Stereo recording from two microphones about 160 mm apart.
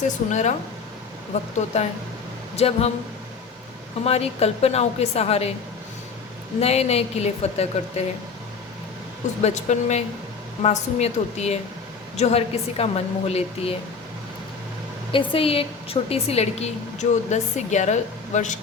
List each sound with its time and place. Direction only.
0.3 s a woman's voice: 50° left (ahead or behind)
1.5 s a woman's voice: 45° left (ahead or behind)
4.0 s a woman's voice: 40° left (ahead or behind)
6.6 s a woman's voice: 40° left (ahead or behind)
9.4 s a woman's voice: 45° left (ahead or behind)
15.1 s a woman's voice: 35° left (ahead or behind)